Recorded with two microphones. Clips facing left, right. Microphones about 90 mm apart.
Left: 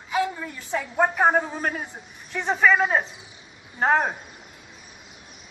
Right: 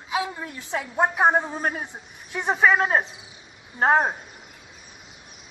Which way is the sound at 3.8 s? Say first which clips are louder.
Right 1 dB; 25° right (ahead or behind).